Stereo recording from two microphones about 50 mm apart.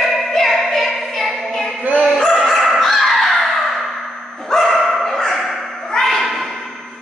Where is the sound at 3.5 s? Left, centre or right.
Centre.